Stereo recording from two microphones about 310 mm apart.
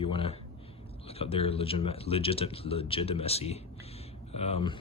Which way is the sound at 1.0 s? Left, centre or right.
Centre.